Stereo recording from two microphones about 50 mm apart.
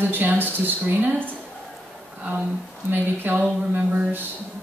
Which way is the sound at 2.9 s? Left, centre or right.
Right.